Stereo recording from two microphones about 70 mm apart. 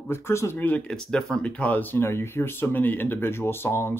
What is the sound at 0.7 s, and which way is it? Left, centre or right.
Speech, centre.